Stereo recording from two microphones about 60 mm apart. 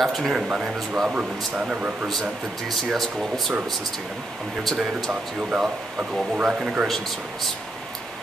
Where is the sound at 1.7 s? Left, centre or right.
Right.